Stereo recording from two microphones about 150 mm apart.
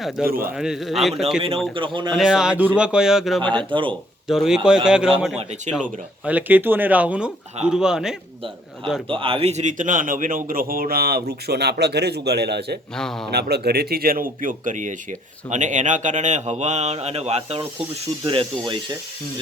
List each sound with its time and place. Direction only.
0.2 s speech: 5° right (ahead or behind)
1.4 s speech: 40° right (ahead or behind)
2.1 s speech: 5° right (ahead or behind)
3.4 s speech: 30° right (ahead or behind)
4.3 s speech: 5° right (ahead or behind)
9.0 s speech: 35° right (ahead or behind); by 12.8 s 90° right
13.0 s speech: 5° left (ahead or behind)
13.3 s speech: 90° right; by 18.8 s 35° right (ahead or behind)